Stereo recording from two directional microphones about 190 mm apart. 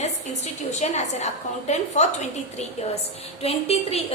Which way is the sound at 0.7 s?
35° left (ahead or behind).